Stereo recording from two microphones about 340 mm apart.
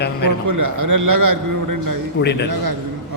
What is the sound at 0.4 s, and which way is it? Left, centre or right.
Speech, right.